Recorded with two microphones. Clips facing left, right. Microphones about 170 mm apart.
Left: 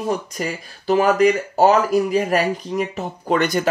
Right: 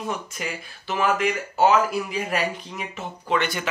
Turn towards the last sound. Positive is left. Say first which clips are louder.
# left 6 dB
turn(degrees=40)  # may be behind; listen again after turning